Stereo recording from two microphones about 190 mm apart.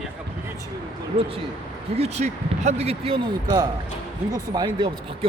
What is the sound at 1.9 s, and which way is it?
Speech, 35° right (ahead or behind).